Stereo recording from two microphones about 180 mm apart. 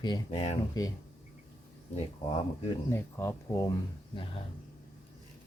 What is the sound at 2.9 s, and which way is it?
Speech, 15° left (ahead or behind).